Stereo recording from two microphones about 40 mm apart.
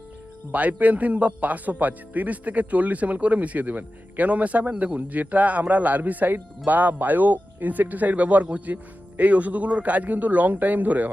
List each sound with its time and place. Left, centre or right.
0.5 s a man's voice: right